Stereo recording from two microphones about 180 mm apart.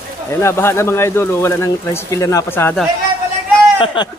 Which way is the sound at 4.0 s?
25° left (ahead or behind).